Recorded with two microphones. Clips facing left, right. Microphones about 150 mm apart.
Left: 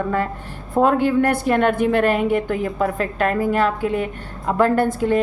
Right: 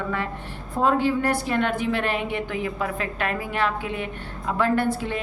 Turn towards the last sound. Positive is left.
turn(degrees=45)  # may be behind; listen again after turning